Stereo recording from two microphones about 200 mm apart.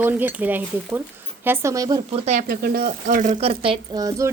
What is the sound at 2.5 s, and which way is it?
Speech, 50° right (ahead or behind).